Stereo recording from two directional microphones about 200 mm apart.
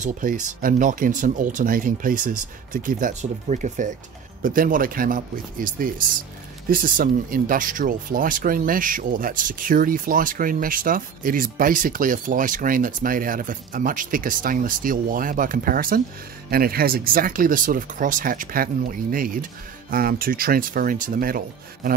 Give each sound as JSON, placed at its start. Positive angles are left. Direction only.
{"t": 0.0, "sound": "speech", "side_deg": -40}